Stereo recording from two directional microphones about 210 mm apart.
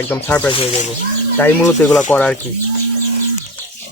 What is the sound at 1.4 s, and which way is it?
Speech, 10° left (ahead or behind).